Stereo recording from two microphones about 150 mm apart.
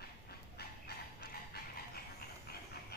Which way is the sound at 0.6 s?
90° left.